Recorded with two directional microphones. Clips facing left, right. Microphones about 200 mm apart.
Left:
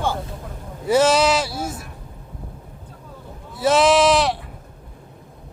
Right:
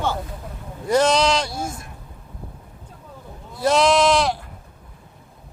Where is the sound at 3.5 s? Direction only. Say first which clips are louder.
Left 1 dB; 5° left (ahead or behind).